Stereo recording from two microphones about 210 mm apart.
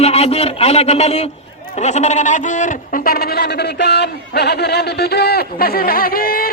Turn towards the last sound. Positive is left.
turn(degrees=45)  # may be behind; listen again after turning